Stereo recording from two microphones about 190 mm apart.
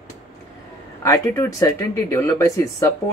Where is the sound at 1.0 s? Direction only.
15° left (ahead or behind).